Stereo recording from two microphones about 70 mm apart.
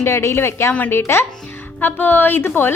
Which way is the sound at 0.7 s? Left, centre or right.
Left.